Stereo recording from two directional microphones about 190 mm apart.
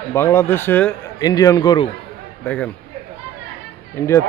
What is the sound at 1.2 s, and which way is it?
Speech, 20° left (ahead or behind).